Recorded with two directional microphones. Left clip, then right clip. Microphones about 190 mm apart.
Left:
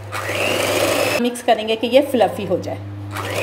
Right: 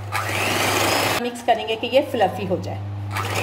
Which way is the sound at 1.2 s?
25° left (ahead or behind).